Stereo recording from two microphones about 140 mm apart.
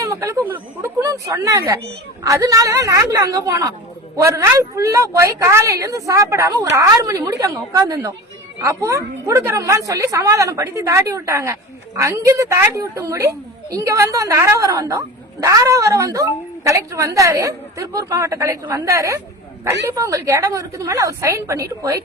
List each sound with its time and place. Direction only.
0.0 s a woman's voice: 20° right (ahead or behind)